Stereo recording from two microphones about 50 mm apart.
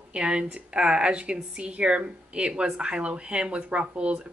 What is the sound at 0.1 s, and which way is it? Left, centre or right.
Speech, right.